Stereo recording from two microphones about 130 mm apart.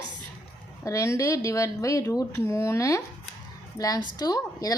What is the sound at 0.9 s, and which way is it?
A woman's voice, 25° left (ahead or behind).